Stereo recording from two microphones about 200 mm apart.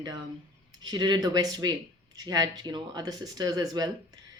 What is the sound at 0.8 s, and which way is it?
Speech, 20° right (ahead or behind).